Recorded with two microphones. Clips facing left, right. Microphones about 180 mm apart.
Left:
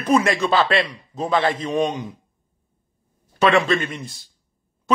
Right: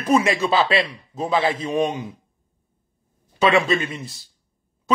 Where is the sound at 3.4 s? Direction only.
5° right (ahead or behind).